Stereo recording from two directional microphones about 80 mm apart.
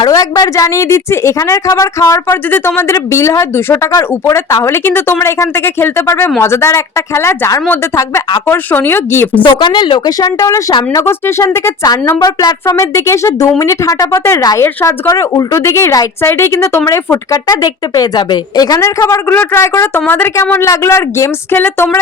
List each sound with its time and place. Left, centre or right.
0.1 s a woman's voice: left
2.2 s a woman's voice: left
8.4 s speech: left
9.4 s speech: left
10.2 s a woman's voice: left
11.0 s a woman's voice: left
11.4 s a woman's voice: left
12.2 s speech: left
12.6 s a woman's voice: left
17.3 s a woman's voice: left
18.2 s a woman's voice: left
18.6 s a woman's voice: left
18.9 s speech: left
19.5 s a woman's voice: left